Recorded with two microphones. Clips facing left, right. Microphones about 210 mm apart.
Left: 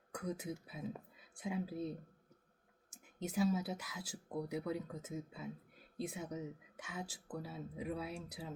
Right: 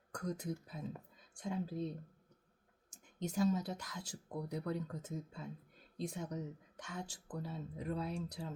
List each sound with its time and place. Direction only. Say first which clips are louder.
0.1 s speech: right 1 dB; 5° left (ahead or behind)
2.9 s speech: even; 5° left (ahead or behind)